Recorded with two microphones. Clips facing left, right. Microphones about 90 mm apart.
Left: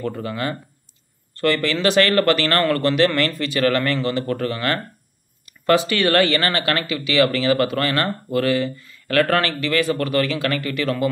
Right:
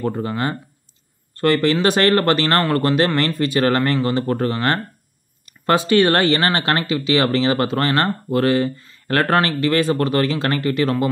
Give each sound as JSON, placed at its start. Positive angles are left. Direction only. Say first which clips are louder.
{"t": 0.0, "sound": "speech", "louder": "right 3 dB", "side_deg": -25}
{"t": 5.9, "sound": "speech", "louder": "right 3 dB", "side_deg": -25}